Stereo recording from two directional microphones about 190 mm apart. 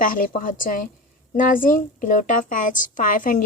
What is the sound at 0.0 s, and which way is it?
A woman's voice, 45° left (ahead or behind).